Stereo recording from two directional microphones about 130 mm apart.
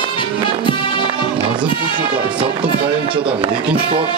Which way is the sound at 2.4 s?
40° right (ahead or behind).